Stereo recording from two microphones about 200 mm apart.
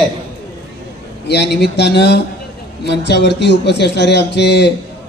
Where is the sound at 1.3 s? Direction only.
55° left (ahead or behind).